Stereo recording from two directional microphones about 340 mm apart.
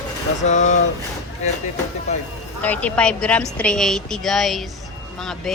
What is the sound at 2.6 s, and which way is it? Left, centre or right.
A woman's voice, centre.